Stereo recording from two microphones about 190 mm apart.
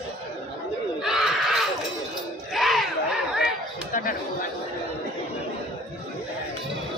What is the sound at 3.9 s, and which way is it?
Chatter, 45° left (ahead or behind).